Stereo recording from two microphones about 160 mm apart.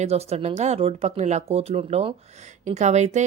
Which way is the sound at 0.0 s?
40° right (ahead or behind).